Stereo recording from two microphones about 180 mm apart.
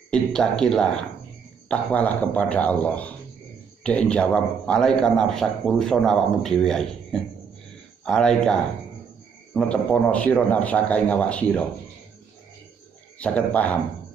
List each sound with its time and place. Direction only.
0.1 s a man's voice: 5° left (ahead or behind)
13.2 s a man's voice: 5° left (ahead or behind)